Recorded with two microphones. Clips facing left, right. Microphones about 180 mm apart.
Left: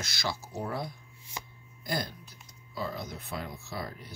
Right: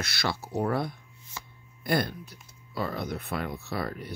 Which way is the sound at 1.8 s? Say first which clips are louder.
Right 7 dB; 60° right (ahead or behind).